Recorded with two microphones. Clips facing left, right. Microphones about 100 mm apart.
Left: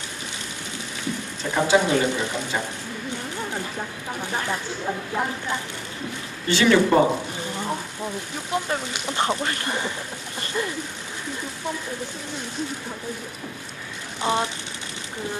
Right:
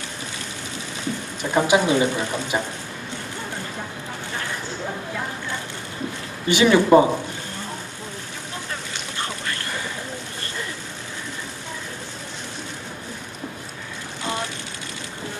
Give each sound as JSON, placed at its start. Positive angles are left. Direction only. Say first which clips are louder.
{"t": 1.4, "sound": "speech", "louder": "right 1 dB", "side_deg": -20}
{"t": 6.5, "sound": "speech", "louder": "right 3 dB", "side_deg": -15}
{"t": 9.1, "sound": "a sound", "louder": "left 7 dB", "side_deg": 20}
{"t": 14.3, "sound": "speech", "louder": "left 5 dB", "side_deg": 25}